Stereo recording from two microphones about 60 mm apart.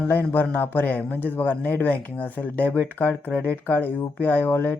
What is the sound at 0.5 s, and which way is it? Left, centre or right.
Speech, left.